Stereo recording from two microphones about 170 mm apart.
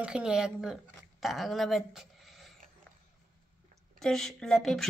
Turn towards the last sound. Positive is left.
turn(degrees=0)  # may be behind; listen again after turning